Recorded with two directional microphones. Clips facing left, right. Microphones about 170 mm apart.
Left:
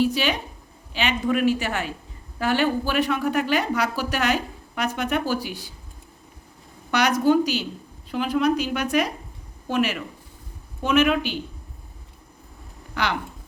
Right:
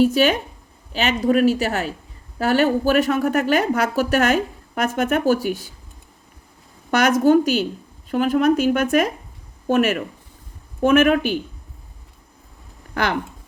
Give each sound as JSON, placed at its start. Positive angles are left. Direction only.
{"t": 0.0, "sound": "speech", "side_deg": -45}
{"t": 6.9, "sound": "speech", "side_deg": -45}
{"t": 12.9, "sound": "speech", "side_deg": -50}